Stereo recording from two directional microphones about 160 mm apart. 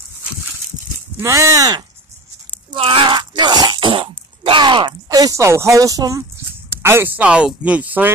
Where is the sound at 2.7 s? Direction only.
35° right (ahead or behind).